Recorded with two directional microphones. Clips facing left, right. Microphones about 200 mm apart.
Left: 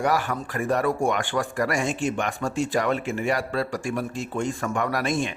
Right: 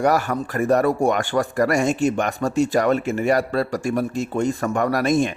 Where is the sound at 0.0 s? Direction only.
45° right (ahead or behind).